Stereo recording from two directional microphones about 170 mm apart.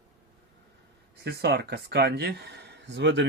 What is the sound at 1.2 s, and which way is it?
Speech, 75° right (ahead or behind).